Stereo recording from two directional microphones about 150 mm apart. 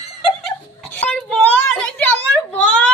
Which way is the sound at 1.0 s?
5° left (ahead or behind).